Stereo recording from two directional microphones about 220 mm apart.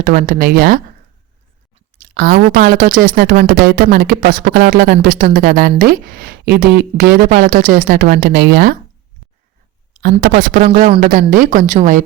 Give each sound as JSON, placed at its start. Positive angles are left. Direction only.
{"t": 0.0, "sound": "a woman's voice", "side_deg": -40}
{"t": 2.1, "sound": "a woman's voice", "side_deg": -40}
{"t": 10.0, "sound": "a woman's voice", "side_deg": -40}